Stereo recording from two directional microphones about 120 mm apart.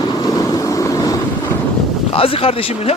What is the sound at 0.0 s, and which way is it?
Vehicle, 35° left (ahead or behind).